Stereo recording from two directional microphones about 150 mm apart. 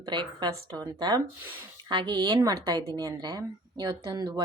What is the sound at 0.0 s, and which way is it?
A woman's voice, 30° right (ahead or behind).